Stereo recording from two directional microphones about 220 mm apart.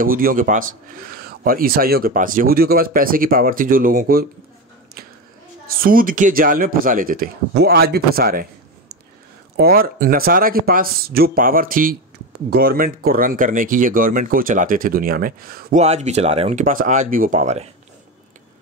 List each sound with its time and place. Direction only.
0.0 s speech: 40° right (ahead or behind)
5.7 s speech: 40° right (ahead or behind)
15.8 s speech: 30° right (ahead or behind)